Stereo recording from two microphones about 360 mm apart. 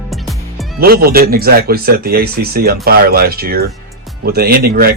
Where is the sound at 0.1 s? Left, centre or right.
Centre.